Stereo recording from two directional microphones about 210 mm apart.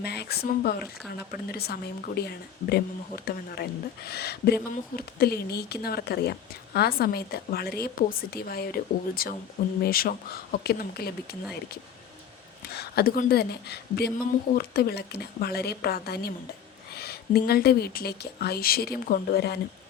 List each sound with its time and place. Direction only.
0.0 s speech: 50° left (ahead or behind)
12.7 s speech: 50° left (ahead or behind)